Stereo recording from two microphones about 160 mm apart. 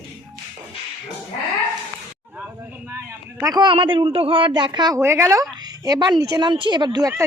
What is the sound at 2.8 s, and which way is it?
A man's voice, 15° right (ahead or behind).